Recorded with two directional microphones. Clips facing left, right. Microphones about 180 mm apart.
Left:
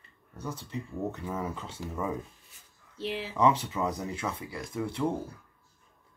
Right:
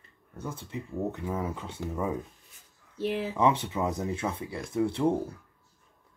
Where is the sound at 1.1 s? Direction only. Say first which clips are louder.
Right 2 dB; 20° right (ahead or behind).